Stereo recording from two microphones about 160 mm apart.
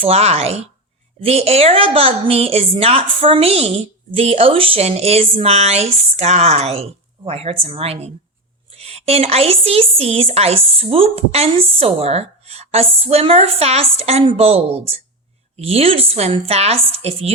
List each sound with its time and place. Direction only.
0.0 s a woman's voice: 40° right (ahead or behind)